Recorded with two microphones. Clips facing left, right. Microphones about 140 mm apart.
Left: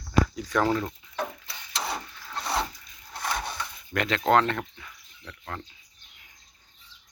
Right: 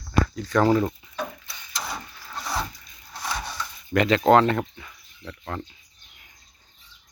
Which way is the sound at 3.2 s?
55° left (ahead or behind).